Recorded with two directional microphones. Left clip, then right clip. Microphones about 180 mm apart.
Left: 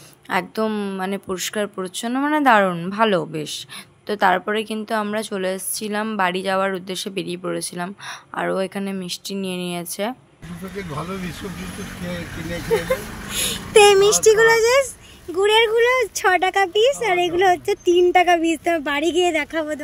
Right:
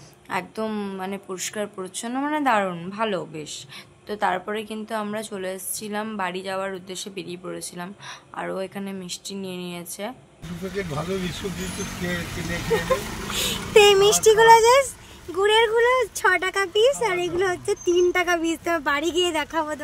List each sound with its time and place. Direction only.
0.3 s a woman's voice: 30° left (ahead or behind)
13.3 s speech: 15° left (ahead or behind)